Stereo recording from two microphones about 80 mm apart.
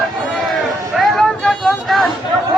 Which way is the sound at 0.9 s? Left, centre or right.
Centre.